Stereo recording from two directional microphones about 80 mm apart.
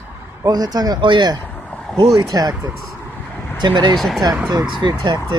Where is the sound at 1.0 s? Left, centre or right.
Right.